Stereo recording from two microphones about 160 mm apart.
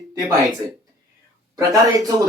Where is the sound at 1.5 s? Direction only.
20° right (ahead or behind).